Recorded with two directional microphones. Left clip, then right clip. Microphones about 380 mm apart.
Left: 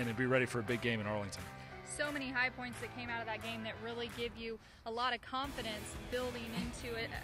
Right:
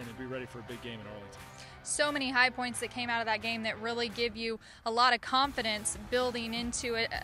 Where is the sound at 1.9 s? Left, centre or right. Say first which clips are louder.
Right 9 dB; right.